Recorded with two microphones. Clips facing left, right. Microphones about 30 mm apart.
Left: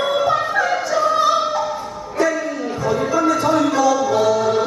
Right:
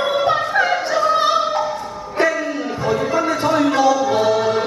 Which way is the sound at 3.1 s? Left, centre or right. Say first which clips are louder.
Left 4 dB; right.